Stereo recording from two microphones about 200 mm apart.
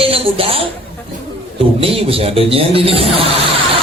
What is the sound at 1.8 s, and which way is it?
A man's voice, 30° right (ahead or behind).